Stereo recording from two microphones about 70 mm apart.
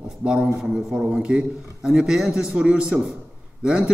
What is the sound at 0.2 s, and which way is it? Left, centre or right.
A man's voice, centre.